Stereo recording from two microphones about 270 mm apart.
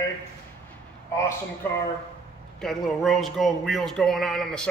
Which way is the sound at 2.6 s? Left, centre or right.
Centre.